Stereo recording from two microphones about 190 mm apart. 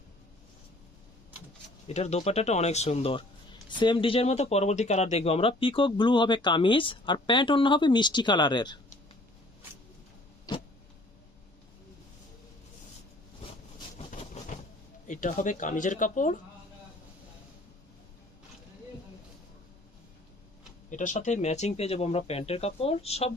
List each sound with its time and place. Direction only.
1.9 s speech: 35° left (ahead or behind)
10.5 s tick-tock: 20° left (ahead or behind)
14.4 s a sound: 35° left (ahead or behind)
15.0 s speech: 40° left (ahead or behind)
20.9 s speech: 40° left (ahead or behind)